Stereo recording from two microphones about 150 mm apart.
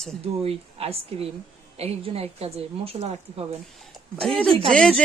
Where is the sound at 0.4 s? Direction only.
40° right (ahead or behind).